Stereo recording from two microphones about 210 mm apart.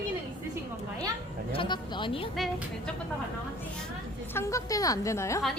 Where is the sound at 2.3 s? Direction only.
Centre (ahead or behind).